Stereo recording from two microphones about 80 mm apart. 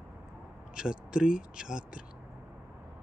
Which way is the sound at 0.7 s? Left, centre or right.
Centre.